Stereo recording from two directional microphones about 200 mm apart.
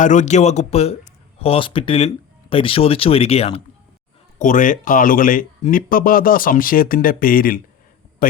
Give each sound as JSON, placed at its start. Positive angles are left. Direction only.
{"t": 0.0, "sound": "speech", "side_deg": 40}
{"t": 4.4, "sound": "speech", "side_deg": 40}